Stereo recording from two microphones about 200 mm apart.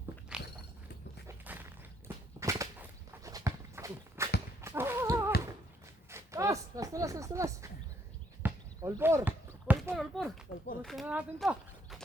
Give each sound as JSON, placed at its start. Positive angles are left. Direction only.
{"t": 0.3, "sound": "dog", "side_deg": -5}
{"t": 1.3, "sound": "a sound", "side_deg": -10}
{"t": 3.1, "sound": "dog", "side_deg": -15}
{"t": 4.6, "sound": "a sound", "side_deg": -10}
{"t": 8.4, "sound": "basketball bounce", "side_deg": -10}
{"t": 9.9, "sound": "speech", "side_deg": 0}